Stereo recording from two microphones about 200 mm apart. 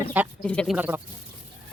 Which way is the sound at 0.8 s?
10° right (ahead or behind).